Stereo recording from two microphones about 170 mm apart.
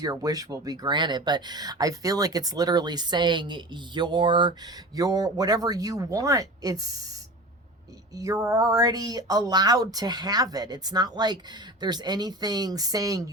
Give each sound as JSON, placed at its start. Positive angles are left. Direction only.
{"t": 0.0, "sound": "speech", "side_deg": -20}
{"t": 8.1, "sound": "speech", "side_deg": -20}